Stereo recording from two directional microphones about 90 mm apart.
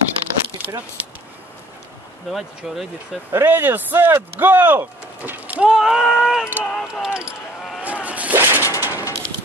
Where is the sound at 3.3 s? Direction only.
25° right (ahead or behind); by 6.5 s 5° right (ahead or behind).